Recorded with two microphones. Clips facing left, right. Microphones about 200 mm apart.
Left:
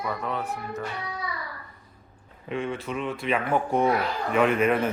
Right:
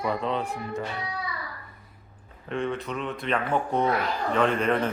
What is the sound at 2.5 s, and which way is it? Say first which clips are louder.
A woman's voice: even; centre (ahead or behind).